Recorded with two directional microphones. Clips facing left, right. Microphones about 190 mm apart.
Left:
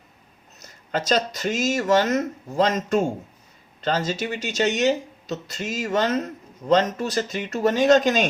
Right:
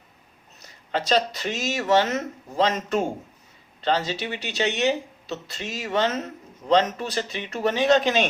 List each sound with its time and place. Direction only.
0.6 s speech: 45° left (ahead or behind)